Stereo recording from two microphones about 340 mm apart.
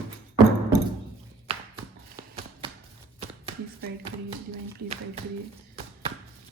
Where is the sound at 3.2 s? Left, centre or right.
Centre.